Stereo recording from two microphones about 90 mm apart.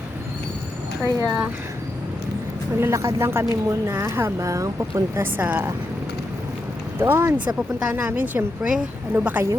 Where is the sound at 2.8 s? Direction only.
35° right (ahead or behind).